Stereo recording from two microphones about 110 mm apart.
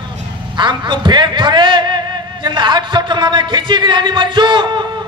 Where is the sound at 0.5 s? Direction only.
45° right (ahead or behind).